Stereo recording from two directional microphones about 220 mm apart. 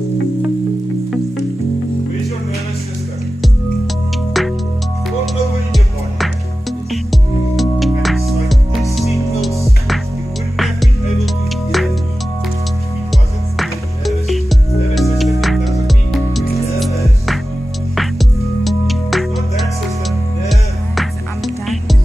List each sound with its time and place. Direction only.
4.3 s music: centre (ahead or behind)
10.6 s music: centre (ahead or behind)
13.1 s music: centre (ahead or behind)
17.9 s music: centre (ahead or behind)